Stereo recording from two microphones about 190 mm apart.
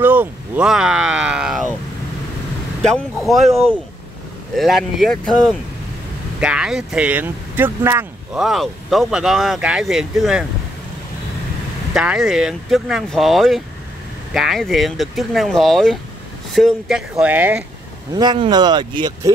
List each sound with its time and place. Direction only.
0.0 s speech: 10° right (ahead or behind)
2.8 s speech: centre (ahead or behind)
4.6 s speech: centre (ahead or behind)
11.9 s speech: 5° right (ahead or behind)
18.1 s speech: 25° right (ahead or behind)